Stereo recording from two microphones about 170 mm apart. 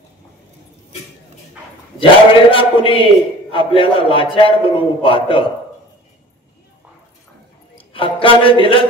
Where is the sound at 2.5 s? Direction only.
30° left (ahead or behind).